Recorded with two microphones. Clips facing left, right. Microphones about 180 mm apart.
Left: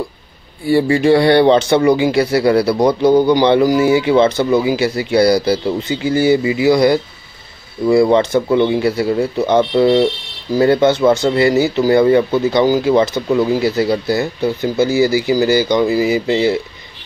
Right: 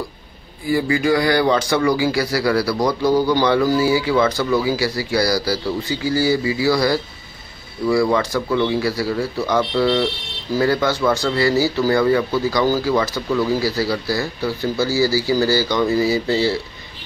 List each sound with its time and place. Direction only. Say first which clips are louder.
0.7 s speech: left 6 dB; 30° left (ahead or behind)